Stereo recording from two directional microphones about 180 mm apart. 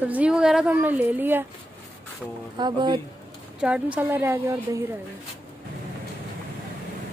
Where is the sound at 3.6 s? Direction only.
5° right (ahead or behind).